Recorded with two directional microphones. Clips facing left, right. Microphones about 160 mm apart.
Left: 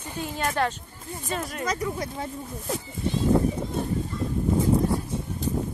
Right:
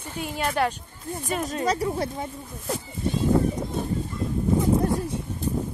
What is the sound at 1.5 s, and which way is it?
Speech, 30° right (ahead or behind).